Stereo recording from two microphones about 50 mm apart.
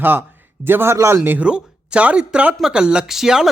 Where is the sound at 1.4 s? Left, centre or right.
Right.